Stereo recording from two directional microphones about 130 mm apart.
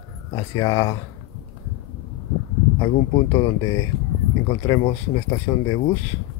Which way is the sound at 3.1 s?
25° left (ahead or behind).